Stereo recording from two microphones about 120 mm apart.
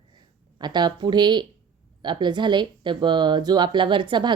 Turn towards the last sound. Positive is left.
turn(degrees=-40)  # may be behind; listen again after turning